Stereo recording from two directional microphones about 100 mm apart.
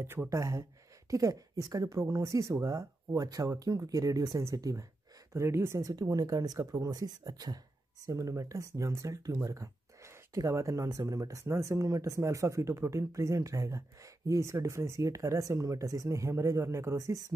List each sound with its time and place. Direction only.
0.0 s speech: 25° right (ahead or behind)